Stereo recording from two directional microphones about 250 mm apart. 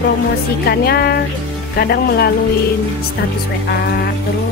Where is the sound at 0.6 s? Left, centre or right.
Left.